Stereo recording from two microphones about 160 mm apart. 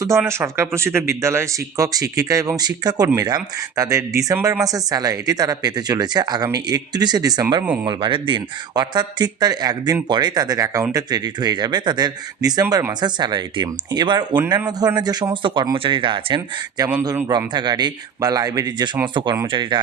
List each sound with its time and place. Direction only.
0.0 s speech: 15° right (ahead or behind)